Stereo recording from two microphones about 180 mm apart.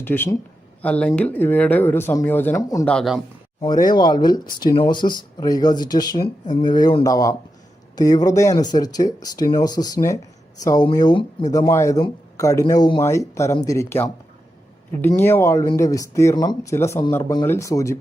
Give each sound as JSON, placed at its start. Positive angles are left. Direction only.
{"t": 0.0, "sound": "speech", "side_deg": 10}
{"t": 2.8, "sound": "speech", "side_deg": 0}
{"t": 3.8, "sound": "speech", "side_deg": 25}